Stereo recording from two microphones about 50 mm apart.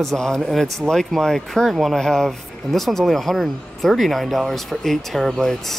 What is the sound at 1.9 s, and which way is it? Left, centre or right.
Speech, centre.